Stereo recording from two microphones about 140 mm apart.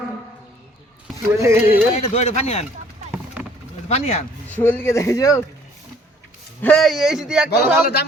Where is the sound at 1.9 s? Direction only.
50° left (ahead or behind).